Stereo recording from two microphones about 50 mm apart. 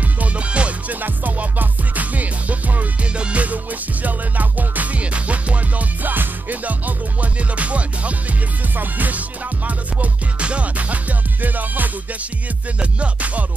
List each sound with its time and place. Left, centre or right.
0.2 s music: right
1.0 s music: right
13.0 s music: right